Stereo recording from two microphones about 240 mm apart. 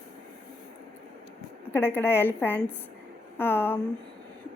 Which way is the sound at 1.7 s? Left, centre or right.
Centre.